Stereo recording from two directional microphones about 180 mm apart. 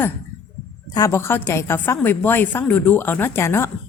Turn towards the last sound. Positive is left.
turn(degrees=15)  # may be behind; listen again after turning